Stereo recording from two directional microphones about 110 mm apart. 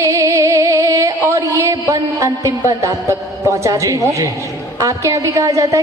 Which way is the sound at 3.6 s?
30° right (ahead or behind).